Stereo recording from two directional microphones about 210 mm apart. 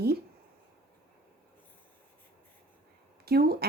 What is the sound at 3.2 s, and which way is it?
Speech, 50° right (ahead or behind).